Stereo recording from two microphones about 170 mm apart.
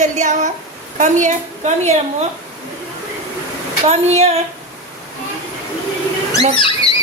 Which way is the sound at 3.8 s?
40° right (ahead or behind).